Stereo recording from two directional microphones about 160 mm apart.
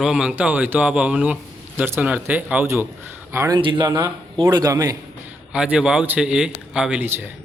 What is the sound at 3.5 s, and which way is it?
A man's voice, 30° right (ahead or behind).